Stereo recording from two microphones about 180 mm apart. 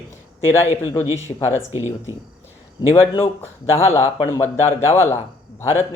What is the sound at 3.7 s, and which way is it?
Speech, 15° left (ahead or behind).